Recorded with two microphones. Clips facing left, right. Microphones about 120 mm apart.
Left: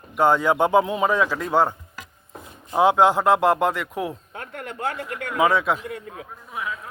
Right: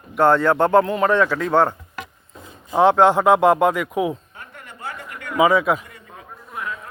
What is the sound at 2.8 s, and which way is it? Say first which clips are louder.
A man's voice: right 3 dB; 5° left (ahead or behind).